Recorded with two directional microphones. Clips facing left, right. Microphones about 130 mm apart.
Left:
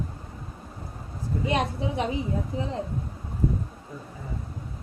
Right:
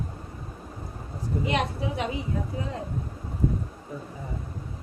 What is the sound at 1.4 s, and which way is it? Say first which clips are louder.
A woman's voice: left 2 dB; 30° left (ahead or behind).